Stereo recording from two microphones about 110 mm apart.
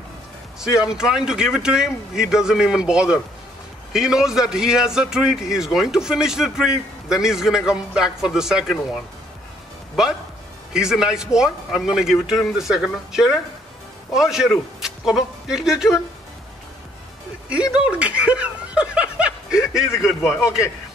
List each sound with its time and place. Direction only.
0.6 s a man's voice: 5° right (ahead or behind)
17.5 s speech: 10° right (ahead or behind)